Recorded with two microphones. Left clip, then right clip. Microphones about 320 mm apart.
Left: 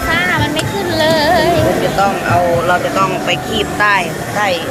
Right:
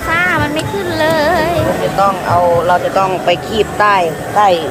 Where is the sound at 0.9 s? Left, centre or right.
Centre.